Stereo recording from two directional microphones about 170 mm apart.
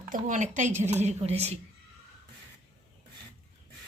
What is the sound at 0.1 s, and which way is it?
A woman's voice, 45° right (ahead or behind).